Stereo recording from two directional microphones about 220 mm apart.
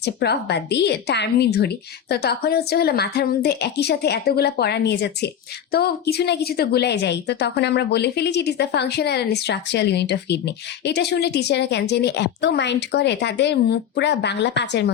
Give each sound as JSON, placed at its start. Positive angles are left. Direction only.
{"t": 0.0, "sound": "a woman's voice", "side_deg": 50}